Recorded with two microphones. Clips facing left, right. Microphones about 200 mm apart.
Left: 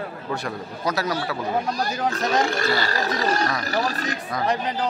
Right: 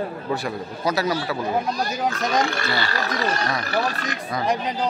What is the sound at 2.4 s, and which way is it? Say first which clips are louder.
Speech: left 2 dB; 40° left (ahead or behind).